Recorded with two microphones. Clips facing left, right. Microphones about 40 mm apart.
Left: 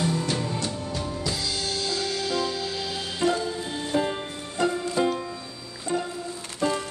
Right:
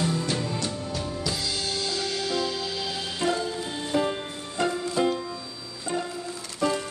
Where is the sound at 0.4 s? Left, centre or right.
Left.